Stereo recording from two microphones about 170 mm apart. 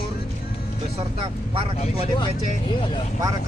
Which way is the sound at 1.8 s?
35° left (ahead or behind).